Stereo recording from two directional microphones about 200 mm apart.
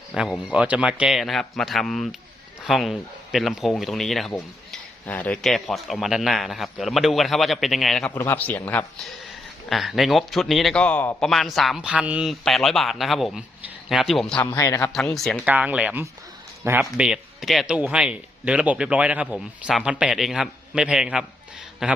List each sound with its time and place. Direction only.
0.1 s speech: 5° right (ahead or behind)
14.5 s speech: 15° left (ahead or behind)
14.9 s speech: centre (ahead or behind)
15.4 s speech: 10° right (ahead or behind)